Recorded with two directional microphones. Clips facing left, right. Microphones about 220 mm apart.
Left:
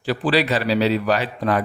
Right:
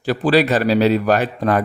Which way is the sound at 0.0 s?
45° right (ahead or behind).